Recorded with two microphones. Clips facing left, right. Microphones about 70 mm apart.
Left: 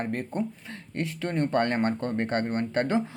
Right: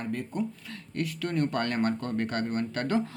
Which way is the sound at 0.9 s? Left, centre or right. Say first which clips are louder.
Left 1 dB; left.